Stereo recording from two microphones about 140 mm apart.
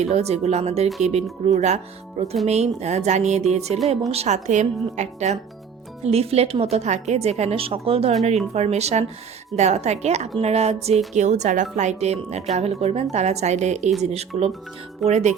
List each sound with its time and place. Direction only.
0.0 s a woman's voice: 50° right (ahead or behind)